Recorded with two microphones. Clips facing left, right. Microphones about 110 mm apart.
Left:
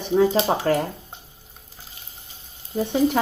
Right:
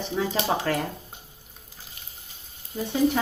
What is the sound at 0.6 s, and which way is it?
Speech, 35° left (ahead or behind).